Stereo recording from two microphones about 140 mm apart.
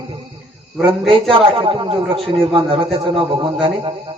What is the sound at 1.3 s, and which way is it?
A man's voice, 40° right (ahead or behind).